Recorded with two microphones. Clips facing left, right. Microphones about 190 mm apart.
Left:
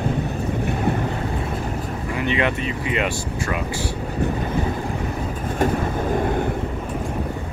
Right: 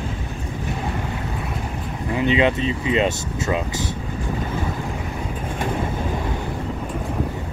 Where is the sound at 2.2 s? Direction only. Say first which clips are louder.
Right 4 dB; 20° right (ahead or behind).